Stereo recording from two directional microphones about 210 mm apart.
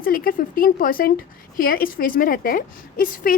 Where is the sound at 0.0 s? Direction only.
45° left (ahead or behind).